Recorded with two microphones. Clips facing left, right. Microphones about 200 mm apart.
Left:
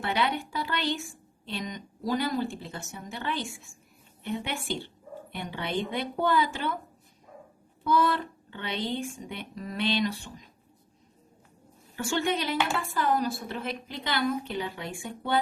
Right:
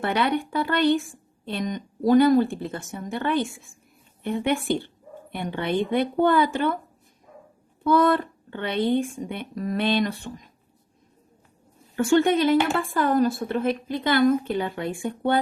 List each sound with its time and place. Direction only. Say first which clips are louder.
0.0 s a woman's voice: right 5 dB; 55° right (ahead or behind)
7.9 s a woman's voice: right 6 dB; 55° right (ahead or behind)
11.9 s a woman's voice: right 10 dB; 50° right (ahead or behind)